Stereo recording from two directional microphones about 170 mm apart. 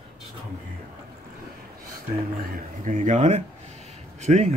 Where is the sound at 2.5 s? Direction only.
50° right (ahead or behind).